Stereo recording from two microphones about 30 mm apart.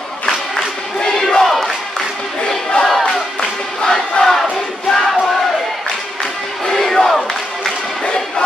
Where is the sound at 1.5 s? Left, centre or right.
Centre.